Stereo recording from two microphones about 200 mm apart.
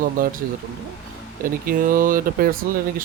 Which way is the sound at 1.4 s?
45° right (ahead or behind).